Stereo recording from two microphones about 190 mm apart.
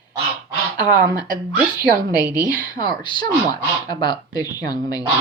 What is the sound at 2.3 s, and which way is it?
Speech, 20° left (ahead or behind).